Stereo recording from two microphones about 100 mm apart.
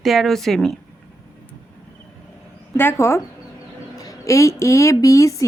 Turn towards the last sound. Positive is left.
turn(degrees=35)  # may be behind; listen again after turning